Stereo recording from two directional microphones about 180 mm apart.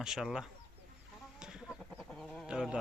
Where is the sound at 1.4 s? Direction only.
5° right (ahead or behind).